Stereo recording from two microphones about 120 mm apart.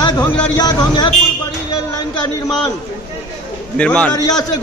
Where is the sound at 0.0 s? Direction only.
30° left (ahead or behind).